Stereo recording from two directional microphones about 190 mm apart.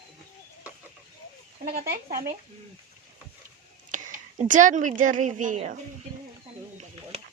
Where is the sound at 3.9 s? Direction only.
45° right (ahead or behind).